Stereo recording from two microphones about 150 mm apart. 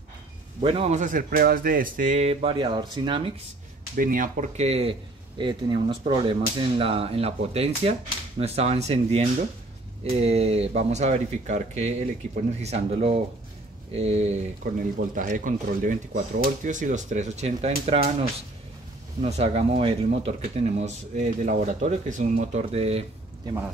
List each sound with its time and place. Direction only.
0.7 s speech: 40° right (ahead or behind)
0.9 s speech: 60° right (ahead or behind); by 3.3 s 35° right (ahead or behind)
3.9 s speech: 65° right (ahead or behind); by 4.9 s 45° right (ahead or behind)
5.4 s speech: 30° right (ahead or behind)
14.6 s speech: 65° right (ahead or behind); by 20.0 s 40° right (ahead or behind)
20.8 s speech: 55° right (ahead or behind)